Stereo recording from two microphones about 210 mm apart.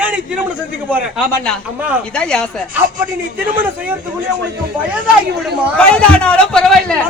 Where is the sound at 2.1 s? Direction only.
5° left (ahead or behind).